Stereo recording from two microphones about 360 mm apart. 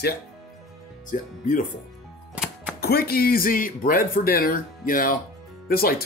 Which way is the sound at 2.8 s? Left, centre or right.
Left.